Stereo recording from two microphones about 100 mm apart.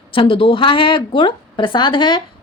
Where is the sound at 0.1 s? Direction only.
65° left (ahead or behind).